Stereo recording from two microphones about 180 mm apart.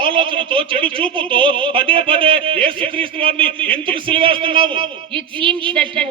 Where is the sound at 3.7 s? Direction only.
30° right (ahead or behind).